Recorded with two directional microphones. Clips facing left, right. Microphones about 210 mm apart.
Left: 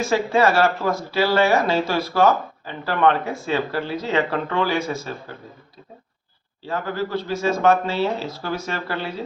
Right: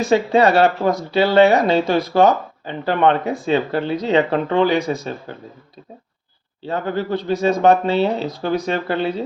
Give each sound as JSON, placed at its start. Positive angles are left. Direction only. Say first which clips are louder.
{"t": 0.0, "sound": "speech", "louder": "right 4 dB", "side_deg": -20}
{"t": 6.7, "sound": "speech", "louder": "right 4 dB", "side_deg": -25}